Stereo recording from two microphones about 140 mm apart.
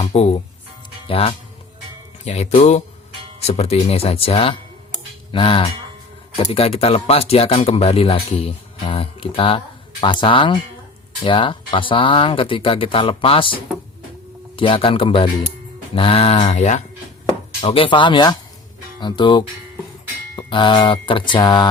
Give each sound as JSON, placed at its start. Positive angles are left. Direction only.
{"t": 0.0, "sound": "speech", "side_deg": 50}
{"t": 2.2, "sound": "speech", "side_deg": 50}
{"t": 17.6, "sound": "speech", "side_deg": 40}